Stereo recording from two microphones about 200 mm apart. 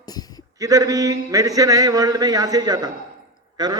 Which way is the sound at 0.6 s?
15° right (ahead or behind).